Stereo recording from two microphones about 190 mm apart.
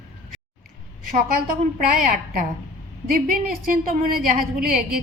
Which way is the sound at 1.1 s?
50° right (ahead or behind).